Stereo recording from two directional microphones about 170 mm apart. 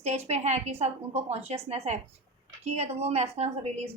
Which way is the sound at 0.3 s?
40° right (ahead or behind).